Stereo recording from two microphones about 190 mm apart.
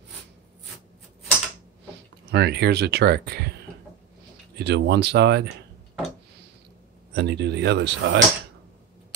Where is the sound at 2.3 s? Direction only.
60° right (ahead or behind).